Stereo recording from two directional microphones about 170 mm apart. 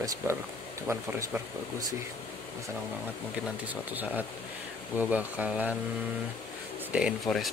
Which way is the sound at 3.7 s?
10° right (ahead or behind).